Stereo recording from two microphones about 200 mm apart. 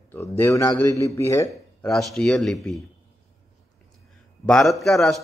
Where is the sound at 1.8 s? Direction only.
Centre (ahead or behind).